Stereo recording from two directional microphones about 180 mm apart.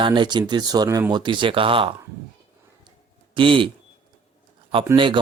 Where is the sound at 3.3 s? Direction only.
30° right (ahead or behind).